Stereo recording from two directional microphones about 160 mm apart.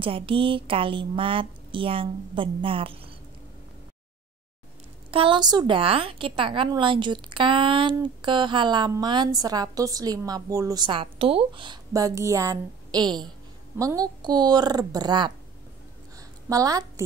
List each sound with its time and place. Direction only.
0.0 s a woman's voice: 35° right (ahead or behind)
5.1 s a woman's voice: 30° right (ahead or behind)
16.2 s a sound: 20° right (ahead or behind)